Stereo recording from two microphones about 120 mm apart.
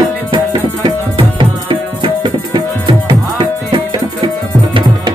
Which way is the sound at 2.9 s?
45° right (ahead or behind).